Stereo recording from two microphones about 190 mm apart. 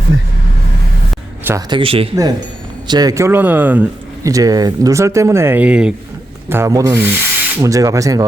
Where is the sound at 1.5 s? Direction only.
15° right (ahead or behind).